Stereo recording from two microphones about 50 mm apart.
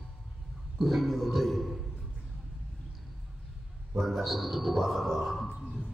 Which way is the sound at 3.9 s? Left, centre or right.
Centre.